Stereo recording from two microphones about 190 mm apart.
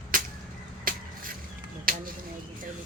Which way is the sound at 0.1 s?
45° right (ahead or behind).